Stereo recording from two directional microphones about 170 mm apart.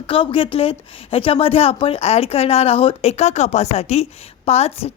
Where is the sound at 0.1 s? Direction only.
30° left (ahead or behind).